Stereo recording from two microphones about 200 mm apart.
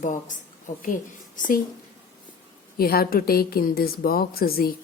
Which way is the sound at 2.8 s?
50° left (ahead or behind).